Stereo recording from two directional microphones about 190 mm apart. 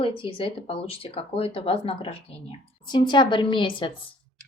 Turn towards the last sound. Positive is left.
turn(degrees=25)  # may be behind; listen again after turning